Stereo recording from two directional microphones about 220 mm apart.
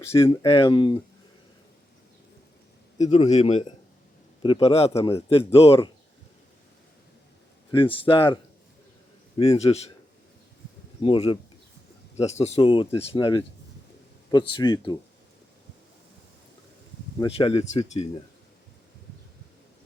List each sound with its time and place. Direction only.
0.4 s speech: 20° left (ahead or behind)
3.0 s a man's voice: 30° left (ahead or behind)
7.7 s speech: 25° left (ahead or behind)
9.4 s speech: 25° left (ahead or behind)
11.0 s speech: 25° left (ahead or behind)
17.2 s speech: 25° left (ahead or behind)